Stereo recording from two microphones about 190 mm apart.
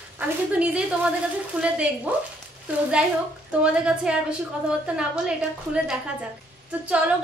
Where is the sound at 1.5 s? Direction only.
5° right (ahead or behind).